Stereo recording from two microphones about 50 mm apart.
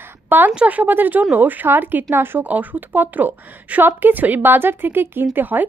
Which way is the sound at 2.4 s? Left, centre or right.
Right.